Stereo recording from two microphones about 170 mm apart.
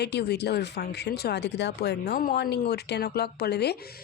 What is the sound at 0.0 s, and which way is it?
Speech, 75° left (ahead or behind).